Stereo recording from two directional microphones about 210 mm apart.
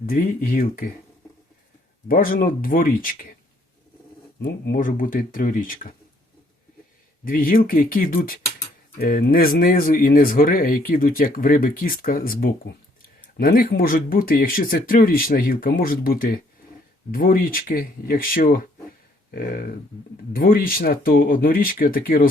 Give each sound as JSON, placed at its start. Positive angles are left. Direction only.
{"t": 0.0, "sound": "speech", "side_deg": 40}
{"t": 2.0, "sound": "speech", "side_deg": 40}
{"t": 4.4, "sound": "speech", "side_deg": 45}
{"t": 7.3, "sound": "speech", "side_deg": 40}